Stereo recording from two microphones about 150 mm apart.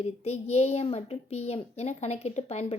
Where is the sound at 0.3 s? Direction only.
45° left (ahead or behind).